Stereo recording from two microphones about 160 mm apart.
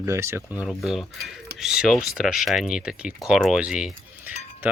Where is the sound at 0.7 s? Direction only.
Centre (ahead or behind).